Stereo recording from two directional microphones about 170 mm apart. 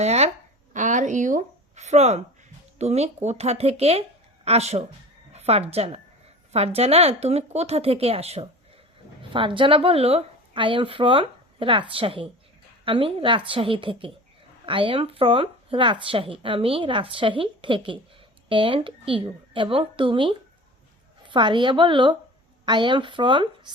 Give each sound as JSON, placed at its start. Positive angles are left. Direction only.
{"t": 0.0, "sound": "a woman's voice", "side_deg": -40}